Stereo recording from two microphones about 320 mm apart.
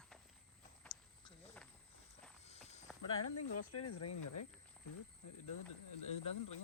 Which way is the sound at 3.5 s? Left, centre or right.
Left.